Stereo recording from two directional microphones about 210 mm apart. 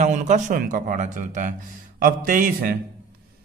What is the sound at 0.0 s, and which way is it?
A man's voice, 35° right (ahead or behind).